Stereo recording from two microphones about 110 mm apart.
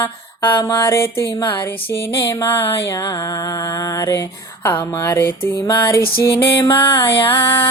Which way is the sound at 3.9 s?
30° left (ahead or behind).